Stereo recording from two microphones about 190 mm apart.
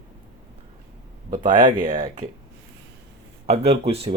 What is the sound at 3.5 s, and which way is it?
Speech, 35° right (ahead or behind).